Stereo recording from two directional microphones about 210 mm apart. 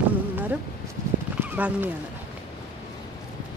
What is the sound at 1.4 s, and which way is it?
Speech, 10° right (ahead or behind).